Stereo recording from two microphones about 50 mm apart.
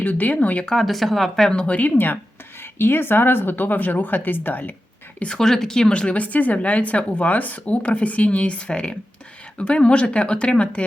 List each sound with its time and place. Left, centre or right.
0.0 s a woman's voice: left
0.6 s speech: centre
1.5 s speech: left
2.6 s a woman's voice: left
5.4 s speech: centre
5.9 s speech: left